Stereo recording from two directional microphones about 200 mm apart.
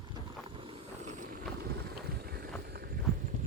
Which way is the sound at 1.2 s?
50° right (ahead or behind).